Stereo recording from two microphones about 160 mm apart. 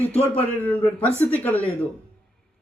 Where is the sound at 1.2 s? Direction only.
10° left (ahead or behind).